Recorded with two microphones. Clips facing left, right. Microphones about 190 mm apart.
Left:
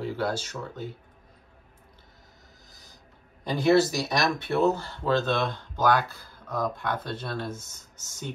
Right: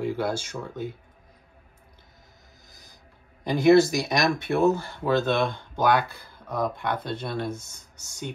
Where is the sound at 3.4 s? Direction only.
10° right (ahead or behind).